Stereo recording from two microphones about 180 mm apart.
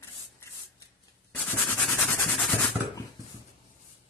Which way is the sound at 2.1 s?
5° left (ahead or behind).